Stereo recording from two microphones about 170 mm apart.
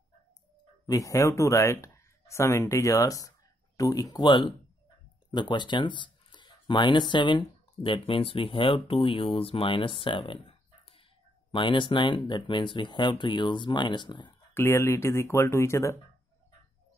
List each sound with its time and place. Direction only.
0.8 s speech: 20° left (ahead or behind)
11.5 s speech: 30° left (ahead or behind)
14.5 s speech: 15° left (ahead or behind)